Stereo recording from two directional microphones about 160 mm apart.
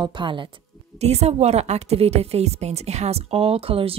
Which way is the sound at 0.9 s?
40° right (ahead or behind).